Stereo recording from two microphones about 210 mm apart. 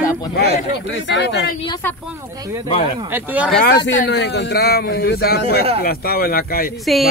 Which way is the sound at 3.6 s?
60° left (ahead or behind).